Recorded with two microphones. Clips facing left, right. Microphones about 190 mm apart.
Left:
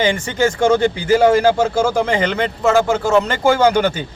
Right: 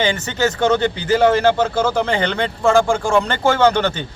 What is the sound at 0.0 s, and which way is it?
Speech, 10° left (ahead or behind).